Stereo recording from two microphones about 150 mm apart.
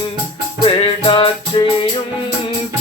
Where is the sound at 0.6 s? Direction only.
35° left (ahead or behind).